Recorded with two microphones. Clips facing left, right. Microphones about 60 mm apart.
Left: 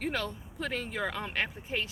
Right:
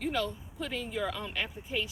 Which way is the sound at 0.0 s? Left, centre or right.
Left.